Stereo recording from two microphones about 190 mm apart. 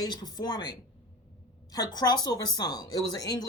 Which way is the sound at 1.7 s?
20° left (ahead or behind).